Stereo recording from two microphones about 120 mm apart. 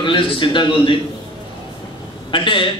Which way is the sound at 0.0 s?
45° left (ahead or behind).